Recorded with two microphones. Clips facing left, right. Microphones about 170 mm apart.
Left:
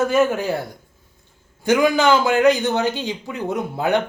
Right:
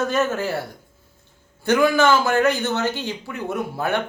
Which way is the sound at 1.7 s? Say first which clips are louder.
Left 1 dB; 15° left (ahead or behind).